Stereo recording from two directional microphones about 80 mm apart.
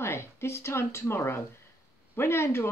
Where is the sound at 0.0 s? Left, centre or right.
Left.